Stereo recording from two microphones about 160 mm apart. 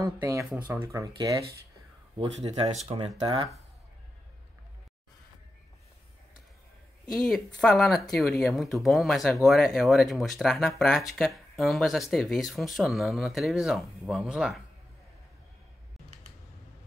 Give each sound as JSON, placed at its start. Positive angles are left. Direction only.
{"t": 0.0, "sound": "speech", "side_deg": -20}
{"t": 0.5, "sound": "speech", "side_deg": -10}
{"t": 0.9, "sound": "speech", "side_deg": -20}
{"t": 2.5, "sound": "speech", "side_deg": -40}
{"t": 7.2, "sound": "speech", "side_deg": 5}